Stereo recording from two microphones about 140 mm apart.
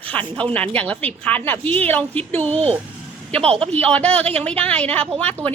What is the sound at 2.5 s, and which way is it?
Speech, 45° right (ahead or behind).